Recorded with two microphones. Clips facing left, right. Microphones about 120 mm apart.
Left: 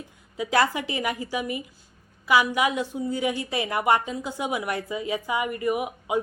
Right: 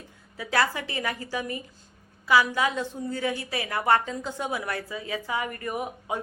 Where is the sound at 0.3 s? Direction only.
20° left (ahead or behind).